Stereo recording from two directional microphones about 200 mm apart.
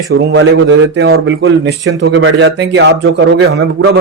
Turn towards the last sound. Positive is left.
turn(degrees=-60)  # may be behind; listen again after turning